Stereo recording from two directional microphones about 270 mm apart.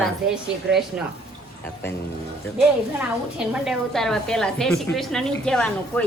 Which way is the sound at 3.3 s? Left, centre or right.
Centre.